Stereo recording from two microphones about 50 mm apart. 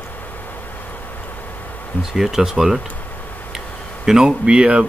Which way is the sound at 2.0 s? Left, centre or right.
Centre.